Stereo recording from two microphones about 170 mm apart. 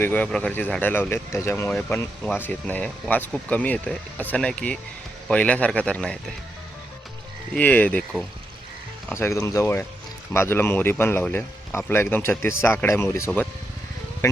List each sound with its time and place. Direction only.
0.0 s a man's voice: 10° left (ahead or behind)
7.5 s a man's voice: 10° left (ahead or behind)